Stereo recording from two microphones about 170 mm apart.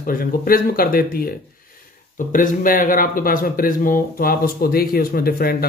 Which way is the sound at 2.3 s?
55° left (ahead or behind).